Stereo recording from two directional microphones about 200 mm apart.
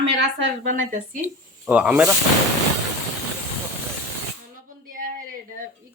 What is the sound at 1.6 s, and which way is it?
Speech, 5° right (ahead or behind).